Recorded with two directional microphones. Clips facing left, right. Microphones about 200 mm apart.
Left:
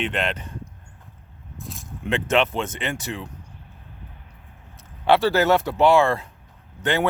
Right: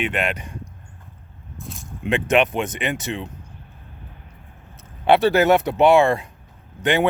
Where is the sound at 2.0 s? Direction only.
15° right (ahead or behind).